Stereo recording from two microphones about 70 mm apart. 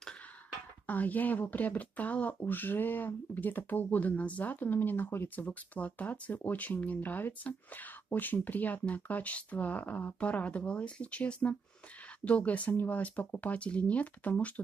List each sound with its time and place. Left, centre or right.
0.8 s speech: left